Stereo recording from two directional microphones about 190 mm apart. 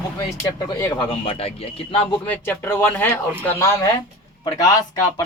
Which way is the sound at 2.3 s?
10° left (ahead or behind).